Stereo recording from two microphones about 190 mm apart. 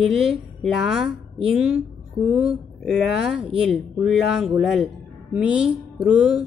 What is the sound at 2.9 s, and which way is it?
Speech, centre (ahead or behind).